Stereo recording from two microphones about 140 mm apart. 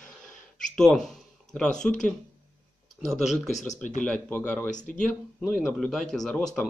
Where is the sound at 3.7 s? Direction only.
60° left (ahead or behind).